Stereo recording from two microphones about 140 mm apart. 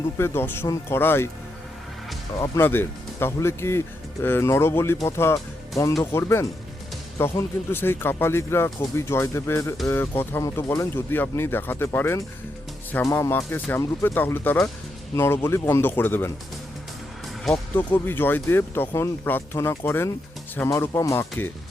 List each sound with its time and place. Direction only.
0.2 s speech: 15° left (ahead or behind)
2.4 s speech: 15° left (ahead or behind)
17.7 s speech: 15° left (ahead or behind)